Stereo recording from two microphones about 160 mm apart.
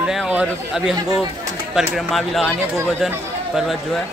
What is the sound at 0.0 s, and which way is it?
Speech, 5° right (ahead or behind).